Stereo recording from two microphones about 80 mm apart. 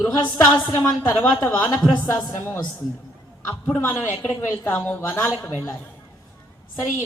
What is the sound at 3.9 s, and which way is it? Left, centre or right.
A man's voice, left.